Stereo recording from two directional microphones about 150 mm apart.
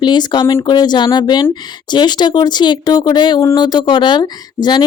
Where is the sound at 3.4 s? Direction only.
20° left (ahead or behind).